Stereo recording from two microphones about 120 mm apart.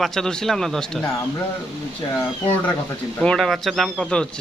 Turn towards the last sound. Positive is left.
turn(degrees=5)  # may be behind; listen again after turning